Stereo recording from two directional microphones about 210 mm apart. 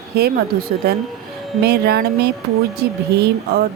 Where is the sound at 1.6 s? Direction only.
50° right (ahead or behind).